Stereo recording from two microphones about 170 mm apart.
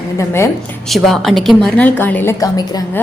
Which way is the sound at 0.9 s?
Centre (ahead or behind).